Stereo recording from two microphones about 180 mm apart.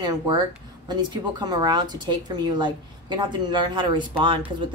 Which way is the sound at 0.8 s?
25° right (ahead or behind).